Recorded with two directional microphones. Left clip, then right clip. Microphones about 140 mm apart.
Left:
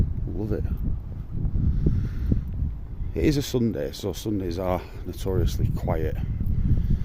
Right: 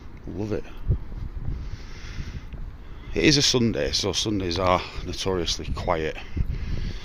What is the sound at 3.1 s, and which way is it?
Speech, 25° left (ahead or behind).